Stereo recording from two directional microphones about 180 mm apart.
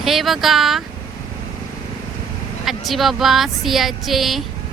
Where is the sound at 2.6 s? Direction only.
Centre (ahead or behind).